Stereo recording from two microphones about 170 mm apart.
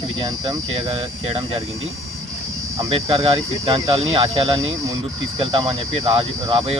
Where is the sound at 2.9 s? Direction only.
35° right (ahead or behind).